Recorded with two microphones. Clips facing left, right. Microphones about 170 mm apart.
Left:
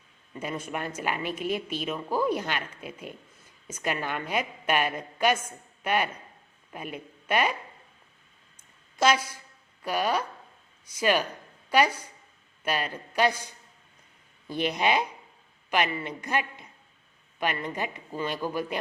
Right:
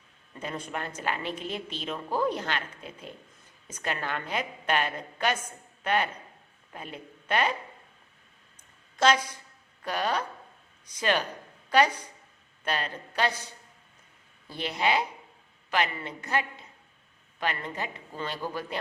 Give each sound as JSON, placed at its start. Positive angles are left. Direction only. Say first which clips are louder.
{"t": 0.3, "sound": "a woman's voice", "louder": "left 2 dB", "side_deg": 10}
{"t": 9.0, "sound": "a woman's voice", "louder": "even", "side_deg": 10}
{"t": 14.5, "sound": "a woman's voice", "louder": "left 2 dB", "side_deg": 15}